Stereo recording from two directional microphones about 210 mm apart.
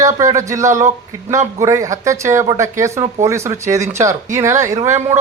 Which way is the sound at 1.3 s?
15° right (ahead or behind).